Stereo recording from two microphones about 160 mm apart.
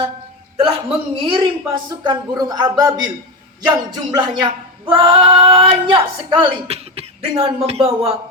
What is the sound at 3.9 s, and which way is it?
Female singing, 30° right (ahead or behind).